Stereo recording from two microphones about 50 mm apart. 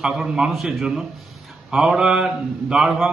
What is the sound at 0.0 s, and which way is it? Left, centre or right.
A man's voice, centre.